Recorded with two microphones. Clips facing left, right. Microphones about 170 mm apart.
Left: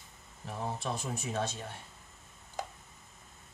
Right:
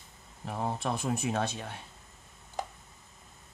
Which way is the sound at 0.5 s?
60° right (ahead or behind).